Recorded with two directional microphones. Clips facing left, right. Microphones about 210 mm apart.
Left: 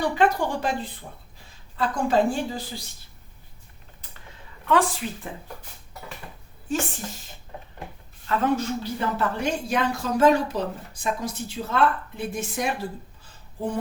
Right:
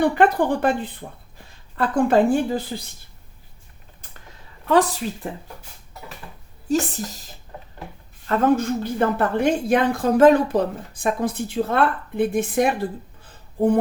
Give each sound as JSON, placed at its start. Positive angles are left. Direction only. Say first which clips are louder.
{"t": 0.0, "sound": "a woman's voice", "louder": "right 5 dB", "side_deg": -55}
{"t": 4.7, "sound": "speech", "louder": "right 4 dB", "side_deg": -40}
{"t": 6.7, "sound": "speech", "louder": "right 6 dB", "side_deg": -40}
{"t": 8.3, "sound": "a woman's voice", "louder": "right 5 dB", "side_deg": -45}